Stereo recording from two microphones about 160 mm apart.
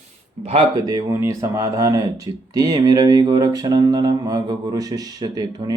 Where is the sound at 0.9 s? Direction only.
20° right (ahead or behind).